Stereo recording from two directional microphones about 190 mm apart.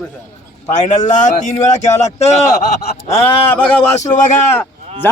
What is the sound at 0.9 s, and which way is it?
A man's voice, 40° left (ahead or behind).